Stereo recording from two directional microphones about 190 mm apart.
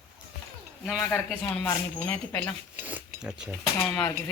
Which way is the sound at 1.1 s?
5° left (ahead or behind).